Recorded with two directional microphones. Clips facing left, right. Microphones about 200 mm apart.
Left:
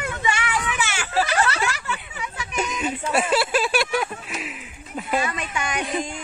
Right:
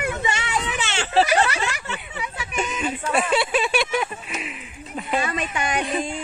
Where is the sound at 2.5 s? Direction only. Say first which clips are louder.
Even; 5° left (ahead or behind).